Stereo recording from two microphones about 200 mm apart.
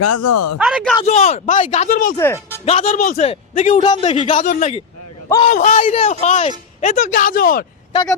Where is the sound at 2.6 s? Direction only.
35° left (ahead or behind).